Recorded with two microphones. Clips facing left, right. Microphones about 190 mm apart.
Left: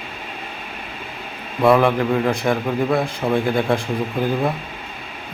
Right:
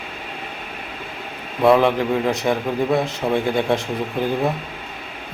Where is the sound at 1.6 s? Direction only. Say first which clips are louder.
Even; 15° right (ahead or behind).